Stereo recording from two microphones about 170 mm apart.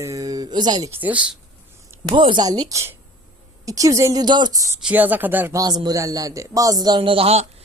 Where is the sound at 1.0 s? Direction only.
5° right (ahead or behind).